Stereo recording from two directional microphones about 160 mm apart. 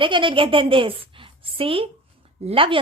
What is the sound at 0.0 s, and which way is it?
A woman's voice, 30° right (ahead or behind).